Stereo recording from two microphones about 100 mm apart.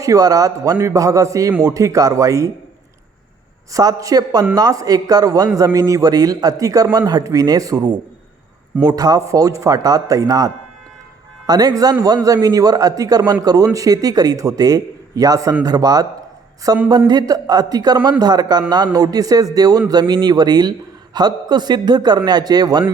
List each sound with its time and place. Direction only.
0.0 s a man's voice: 35° right (ahead or behind)
3.7 s a man's voice: 35° right (ahead or behind)
8.8 s a man's voice: 40° right (ahead or behind)